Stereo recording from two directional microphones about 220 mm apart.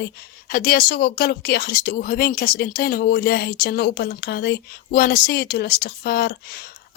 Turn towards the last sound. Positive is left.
turn(degrees=45)  # may be behind; listen again after turning